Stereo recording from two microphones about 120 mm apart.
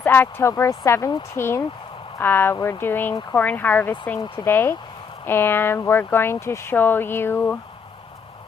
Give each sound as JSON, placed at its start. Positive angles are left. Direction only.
{"t": 0.0, "sound": "speech", "side_deg": 15}